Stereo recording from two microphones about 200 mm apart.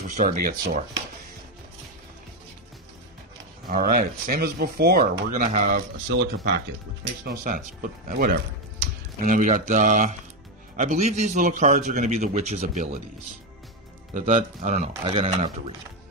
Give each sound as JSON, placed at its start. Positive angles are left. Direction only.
{"t": 0.0, "sound": "a man's voice", "side_deg": -35}
{"t": 3.6, "sound": "speech", "side_deg": -40}
{"t": 6.0, "sound": "speech", "side_deg": -55}
{"t": 7.2, "sound": "a man's voice", "side_deg": -40}
{"t": 14.1, "sound": "a man's voice", "side_deg": -40}
{"t": 15.0, "sound": "speech", "side_deg": -25}